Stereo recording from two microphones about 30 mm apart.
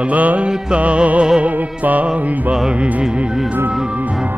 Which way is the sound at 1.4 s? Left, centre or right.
Right.